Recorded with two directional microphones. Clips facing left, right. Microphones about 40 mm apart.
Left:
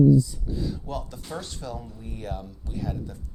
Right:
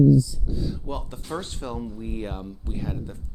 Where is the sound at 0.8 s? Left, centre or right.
Right.